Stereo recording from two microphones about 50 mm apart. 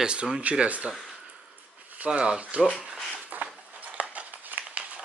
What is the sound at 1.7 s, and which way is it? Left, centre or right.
Speech, right.